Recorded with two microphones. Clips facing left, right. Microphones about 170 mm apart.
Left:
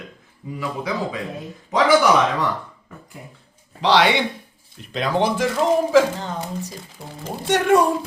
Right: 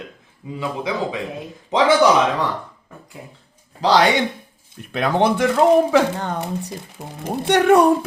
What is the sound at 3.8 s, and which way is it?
Speech, 40° right (ahead or behind).